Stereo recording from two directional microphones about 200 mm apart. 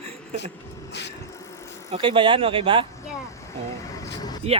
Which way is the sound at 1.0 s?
60° left (ahead or behind).